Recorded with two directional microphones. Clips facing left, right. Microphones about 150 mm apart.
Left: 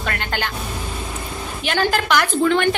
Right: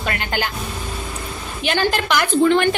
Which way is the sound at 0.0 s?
15° right (ahead or behind).